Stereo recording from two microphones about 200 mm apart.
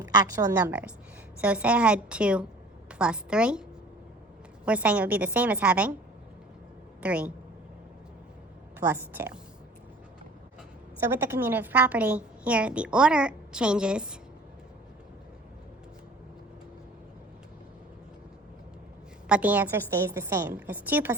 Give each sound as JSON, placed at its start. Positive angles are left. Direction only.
{"t": 0.0, "sound": "a woman's voice", "side_deg": -20}
{"t": 1.4, "sound": "a woman's voice", "side_deg": -5}
{"t": 4.6, "sound": "a woman's voice", "side_deg": -5}
{"t": 7.0, "sound": "a woman's voice", "side_deg": -5}
{"t": 8.8, "sound": "a woman's voice", "side_deg": -10}
{"t": 11.3, "sound": "a woman's voice", "side_deg": -10}
{"t": 19.3, "sound": "a woman's voice", "side_deg": -10}